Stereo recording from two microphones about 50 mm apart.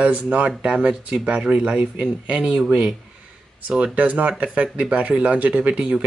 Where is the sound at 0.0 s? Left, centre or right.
Right.